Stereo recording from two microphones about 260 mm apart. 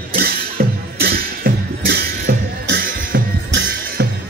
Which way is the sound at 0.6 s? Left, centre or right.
Right.